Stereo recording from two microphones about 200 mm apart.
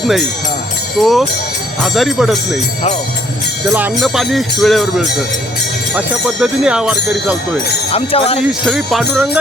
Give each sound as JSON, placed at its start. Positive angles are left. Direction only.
{"t": 0.9, "sound": "speech", "side_deg": 0}
{"t": 3.7, "sound": "speech", "side_deg": -10}
{"t": 7.9, "sound": "speech", "side_deg": 30}
{"t": 8.6, "sound": "speech", "side_deg": 0}